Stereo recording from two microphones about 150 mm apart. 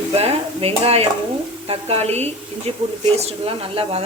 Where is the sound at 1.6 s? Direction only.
40° right (ahead or behind).